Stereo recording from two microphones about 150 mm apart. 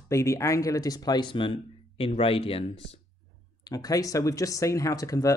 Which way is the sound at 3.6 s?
25° left (ahead or behind).